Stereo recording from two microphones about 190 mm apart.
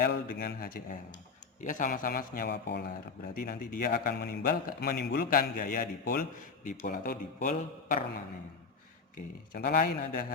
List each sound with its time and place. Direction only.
0.0 s a man's voice: 50° left (ahead or behind)
3.3 s a man's voice: 50° left (ahead or behind)
9.1 s a man's voice: 45° left (ahead or behind)